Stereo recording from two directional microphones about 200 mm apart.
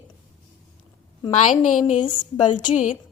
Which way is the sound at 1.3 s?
35° left (ahead or behind).